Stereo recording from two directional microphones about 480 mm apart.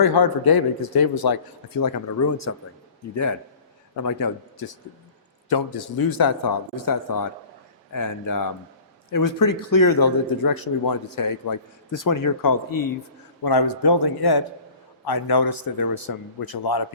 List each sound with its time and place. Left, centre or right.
0.0 s a man's voice: left
4.0 s a man's voice: left